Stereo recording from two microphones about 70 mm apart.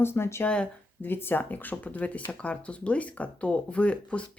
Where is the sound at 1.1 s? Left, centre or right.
Left.